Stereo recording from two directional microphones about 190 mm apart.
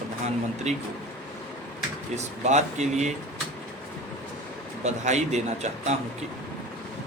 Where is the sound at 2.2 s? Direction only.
35° right (ahead or behind).